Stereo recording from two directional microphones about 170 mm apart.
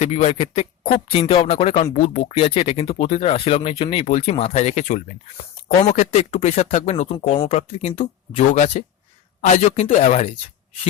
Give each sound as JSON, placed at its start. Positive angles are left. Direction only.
{"t": 0.0, "sound": "speech", "side_deg": 40}